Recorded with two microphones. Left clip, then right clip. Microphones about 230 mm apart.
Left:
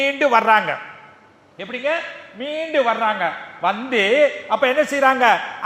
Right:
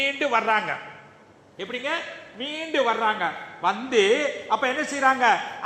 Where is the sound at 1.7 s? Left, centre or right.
Left.